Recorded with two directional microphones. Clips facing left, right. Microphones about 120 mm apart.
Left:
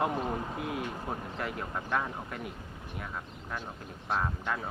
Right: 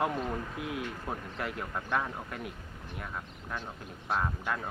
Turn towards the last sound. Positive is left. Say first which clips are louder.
# even
turn(degrees=0)  # may be behind; listen again after turning